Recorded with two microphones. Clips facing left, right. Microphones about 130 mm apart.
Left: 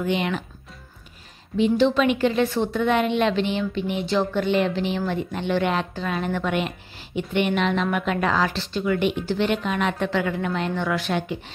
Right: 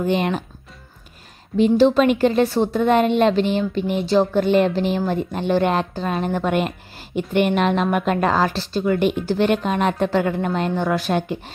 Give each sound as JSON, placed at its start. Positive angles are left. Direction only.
{"t": 0.0, "sound": "a woman's voice", "side_deg": -35}
{"t": 1.6, "sound": "a woman's voice", "side_deg": -40}